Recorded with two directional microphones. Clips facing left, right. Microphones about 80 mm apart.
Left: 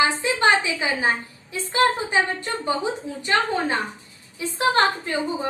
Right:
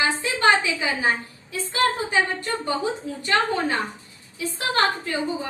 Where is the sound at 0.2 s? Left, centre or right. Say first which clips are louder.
Even; left.